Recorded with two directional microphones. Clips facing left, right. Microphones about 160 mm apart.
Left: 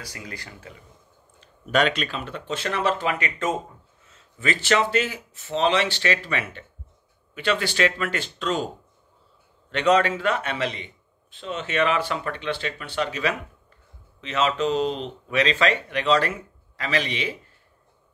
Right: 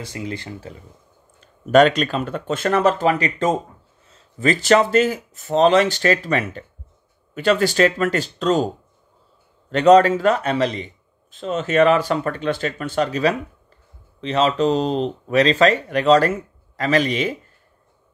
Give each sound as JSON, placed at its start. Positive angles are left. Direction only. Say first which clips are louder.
{"t": 0.0, "sound": "speech", "louder": "right 9 dB", "side_deg": -25}
{"t": 1.4, "sound": "speech", "louder": "right 9 dB", "side_deg": -45}
{"t": 9.7, "sound": "speech", "louder": "right 8 dB", "side_deg": -40}